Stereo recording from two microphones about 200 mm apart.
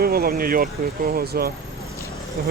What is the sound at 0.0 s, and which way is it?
Speech, 50° right (ahead or behind).